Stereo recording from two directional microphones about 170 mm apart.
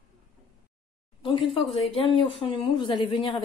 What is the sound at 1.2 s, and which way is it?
Speech, 30° left (ahead or behind).